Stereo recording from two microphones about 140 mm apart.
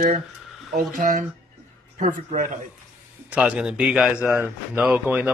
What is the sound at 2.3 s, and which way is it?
Speech, 65° right (ahead or behind).